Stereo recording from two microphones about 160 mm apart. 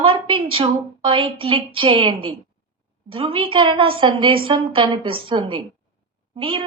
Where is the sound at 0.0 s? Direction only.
35° right (ahead or behind).